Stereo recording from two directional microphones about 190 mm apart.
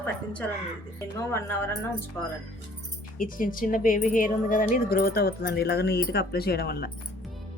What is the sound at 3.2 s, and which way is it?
Speech, 45° left (ahead or behind).